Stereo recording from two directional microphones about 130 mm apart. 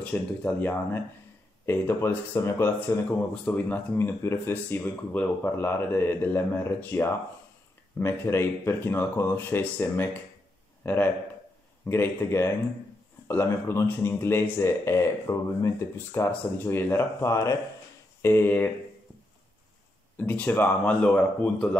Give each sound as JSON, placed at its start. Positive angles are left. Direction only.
{"t": 0.0, "sound": "speech", "side_deg": 15}
{"t": 20.2, "sound": "speech", "side_deg": 15}